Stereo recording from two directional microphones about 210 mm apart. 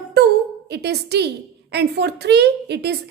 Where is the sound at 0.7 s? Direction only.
50° right (ahead or behind).